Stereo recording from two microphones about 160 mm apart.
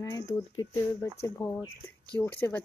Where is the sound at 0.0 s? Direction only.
20° left (ahead or behind).